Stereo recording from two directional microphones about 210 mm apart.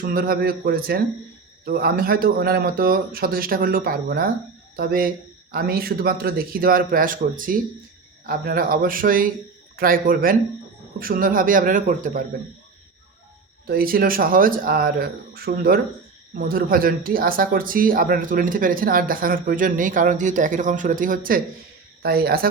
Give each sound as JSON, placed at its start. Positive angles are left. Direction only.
{"t": 0.0, "sound": "a man's voice", "side_deg": -45}
{"t": 13.7, "sound": "a man's voice", "side_deg": -45}